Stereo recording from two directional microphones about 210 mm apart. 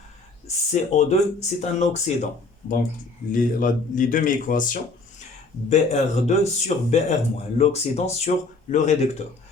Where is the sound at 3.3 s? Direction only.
40° left (ahead or behind).